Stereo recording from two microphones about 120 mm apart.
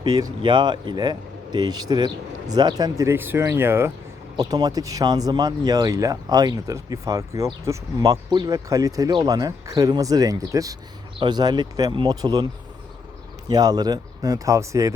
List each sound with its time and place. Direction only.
0.0 s a man's voice: 30° right (ahead or behind)
4.4 s speech: 35° right (ahead or behind)
13.5 s speech: 35° right (ahead or behind)